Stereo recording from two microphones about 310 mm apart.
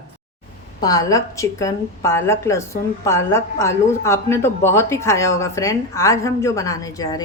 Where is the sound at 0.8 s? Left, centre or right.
Centre.